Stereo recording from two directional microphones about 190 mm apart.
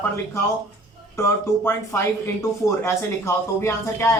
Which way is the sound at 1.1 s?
15° left (ahead or behind).